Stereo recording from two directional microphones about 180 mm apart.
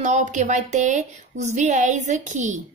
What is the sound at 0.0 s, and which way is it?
A woman's voice, 40° right (ahead or behind).